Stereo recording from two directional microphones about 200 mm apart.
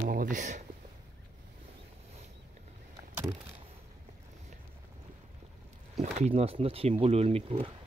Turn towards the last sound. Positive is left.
turn(degrees=-30)  # may be behind; listen again after turning